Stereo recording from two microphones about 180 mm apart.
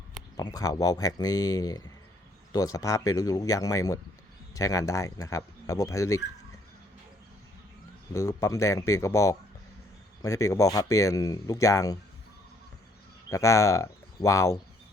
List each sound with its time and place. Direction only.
0.3 s speech: 20° left (ahead or behind)
8.1 s speech: 15° left (ahead or behind)
13.3 s speech: 15° left (ahead or behind)